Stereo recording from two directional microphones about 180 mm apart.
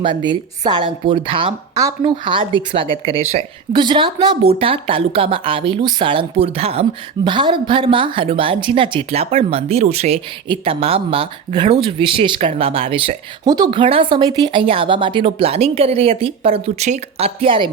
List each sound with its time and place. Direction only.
0.0 s a woman's voice: 25° right (ahead or behind)